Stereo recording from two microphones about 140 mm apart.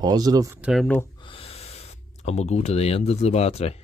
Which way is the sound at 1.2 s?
40° left (ahead or behind).